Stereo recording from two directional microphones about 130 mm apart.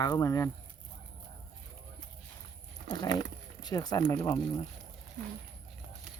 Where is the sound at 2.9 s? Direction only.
35° left (ahead or behind).